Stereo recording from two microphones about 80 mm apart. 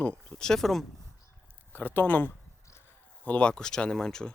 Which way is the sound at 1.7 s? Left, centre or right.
Left.